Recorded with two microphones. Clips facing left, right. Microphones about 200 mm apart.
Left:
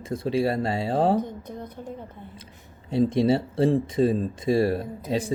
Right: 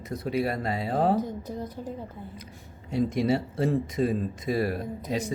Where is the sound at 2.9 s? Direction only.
30° left (ahead or behind).